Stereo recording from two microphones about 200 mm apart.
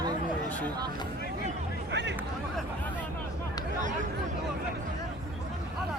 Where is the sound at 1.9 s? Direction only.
60° right (ahead or behind).